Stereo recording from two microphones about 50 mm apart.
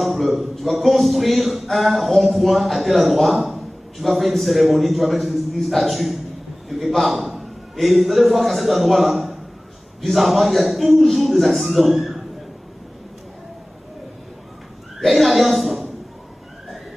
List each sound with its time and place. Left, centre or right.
0.0 s a man's voice: centre
15.0 s a woman's voice: centre